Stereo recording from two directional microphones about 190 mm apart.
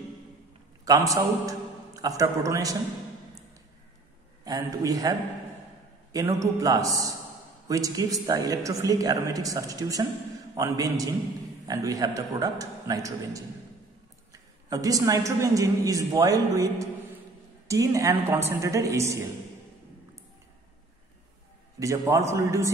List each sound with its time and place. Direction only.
0.8 s a man's voice: 20° right (ahead or behind)
4.5 s a man's voice: 20° right (ahead or behind)
6.1 s a man's voice: 15° right (ahead or behind)
21.7 s a woman's voice: 15° right (ahead or behind)